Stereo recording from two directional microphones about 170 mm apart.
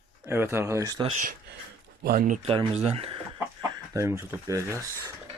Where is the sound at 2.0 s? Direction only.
55° right (ahead or behind).